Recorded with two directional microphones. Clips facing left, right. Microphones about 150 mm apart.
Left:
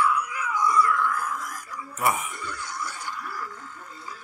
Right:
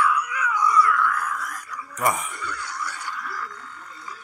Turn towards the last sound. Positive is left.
turn(degrees=20)  # may be behind; listen again after turning